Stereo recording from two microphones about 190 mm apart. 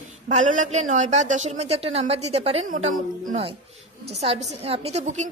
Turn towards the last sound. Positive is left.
turn(degrees=-35)  # may be behind; listen again after turning